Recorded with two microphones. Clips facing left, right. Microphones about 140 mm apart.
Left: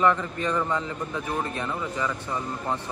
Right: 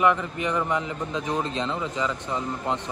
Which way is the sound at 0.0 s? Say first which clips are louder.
Right 1 dB; 15° right (ahead or behind).